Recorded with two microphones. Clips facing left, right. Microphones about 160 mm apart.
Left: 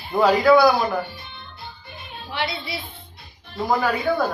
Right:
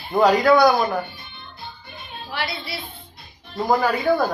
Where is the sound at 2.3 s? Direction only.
20° left (ahead or behind).